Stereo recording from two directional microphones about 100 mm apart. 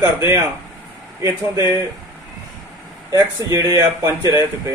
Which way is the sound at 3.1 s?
40° right (ahead or behind).